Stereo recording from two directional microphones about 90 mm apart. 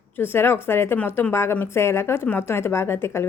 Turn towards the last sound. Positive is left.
turn(degrees=30)  # may be behind; listen again after turning